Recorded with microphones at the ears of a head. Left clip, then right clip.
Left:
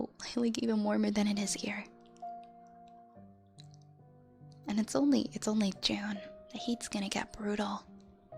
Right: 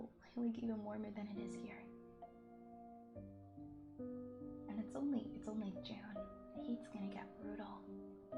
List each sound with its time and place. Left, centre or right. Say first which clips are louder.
0.0 s a woman's voice: left 12 dB; left
4.6 s speech: left 15 dB; left